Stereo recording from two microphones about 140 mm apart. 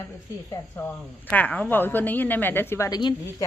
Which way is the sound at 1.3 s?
10° left (ahead or behind).